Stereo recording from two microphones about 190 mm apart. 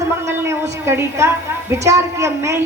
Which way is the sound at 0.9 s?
15° right (ahead or behind).